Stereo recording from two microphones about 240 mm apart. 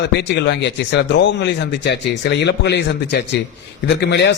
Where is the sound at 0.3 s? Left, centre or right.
Left.